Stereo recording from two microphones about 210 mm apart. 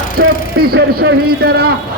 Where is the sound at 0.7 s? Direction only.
50° right (ahead or behind).